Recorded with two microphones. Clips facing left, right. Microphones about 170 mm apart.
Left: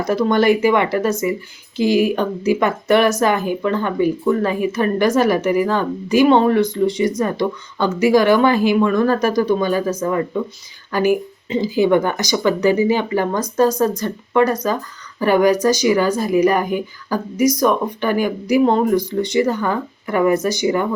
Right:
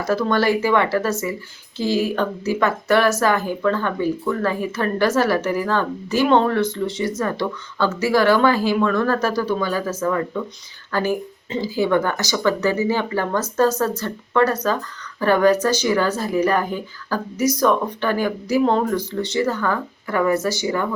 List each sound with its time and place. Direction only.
0.0 s speech: 20° left (ahead or behind)